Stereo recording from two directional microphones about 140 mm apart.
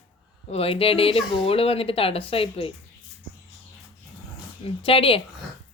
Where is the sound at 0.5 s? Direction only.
45° left (ahead or behind).